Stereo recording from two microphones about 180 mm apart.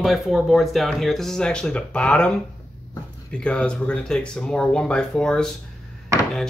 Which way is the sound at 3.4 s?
5° left (ahead or behind).